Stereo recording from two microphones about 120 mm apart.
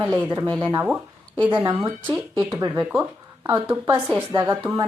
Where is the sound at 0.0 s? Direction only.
15° right (ahead or behind).